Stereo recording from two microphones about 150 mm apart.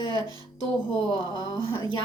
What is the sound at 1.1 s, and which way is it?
Speech, 30° left (ahead or behind).